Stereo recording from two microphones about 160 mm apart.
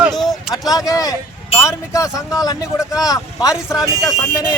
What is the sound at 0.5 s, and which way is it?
Speech, 25° left (ahead or behind).